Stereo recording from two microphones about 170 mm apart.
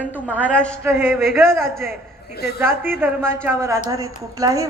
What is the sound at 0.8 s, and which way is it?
Speech, 10° right (ahead or behind).